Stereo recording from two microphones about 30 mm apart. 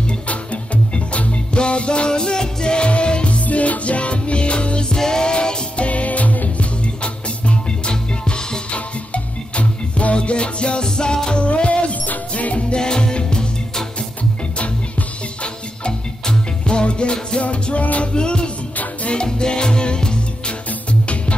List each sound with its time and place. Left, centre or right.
0.9 s music: left
4.9 s music: left
5.8 s music: left
6.6 s music: left
9.1 s music: left
10.1 s music: left
12.1 s music: left
12.5 s music: left
16.3 s music: left
17.4 s music: left
18.0 s music: left